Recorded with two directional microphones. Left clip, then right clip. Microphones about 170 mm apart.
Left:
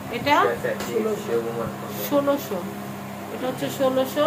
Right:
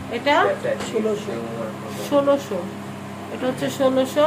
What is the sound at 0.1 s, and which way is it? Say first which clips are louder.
Speech: right 1 dB; 10° right (ahead or behind).